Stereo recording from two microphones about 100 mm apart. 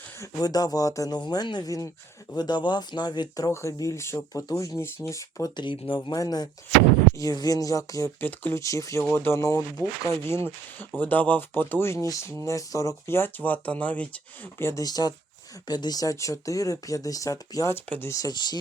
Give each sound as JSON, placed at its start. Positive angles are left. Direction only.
{"t": 0.2, "sound": "speech", "side_deg": 40}
{"t": 5.7, "sound": "speech", "side_deg": 60}
{"t": 6.1, "sound": "speech", "side_deg": 40}
{"t": 8.2, "sound": "speech", "side_deg": 20}
{"t": 8.6, "sound": "speech", "side_deg": 35}
{"t": 14.7, "sound": "speech", "side_deg": 40}
{"t": 17.7, "sound": "speech", "side_deg": 20}
{"t": 18.1, "sound": "speech", "side_deg": 40}